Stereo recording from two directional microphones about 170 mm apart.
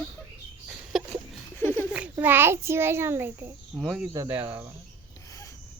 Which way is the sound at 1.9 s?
10° right (ahead or behind).